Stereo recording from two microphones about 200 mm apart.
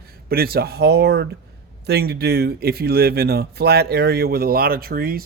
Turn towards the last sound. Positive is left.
turn(degrees=-50)  # may be behind; listen again after turning